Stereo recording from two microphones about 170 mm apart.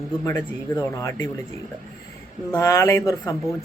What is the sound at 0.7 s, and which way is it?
Speech, 10° left (ahead or behind).